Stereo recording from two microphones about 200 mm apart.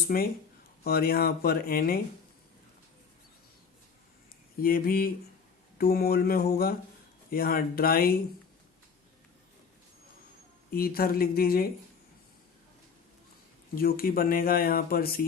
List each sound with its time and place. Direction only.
0.1 s speech: 50° left (ahead or behind)
4.6 s speech: 45° left (ahead or behind)
10.7 s speech: 50° left (ahead or behind)
13.7 s speech: 45° left (ahead or behind)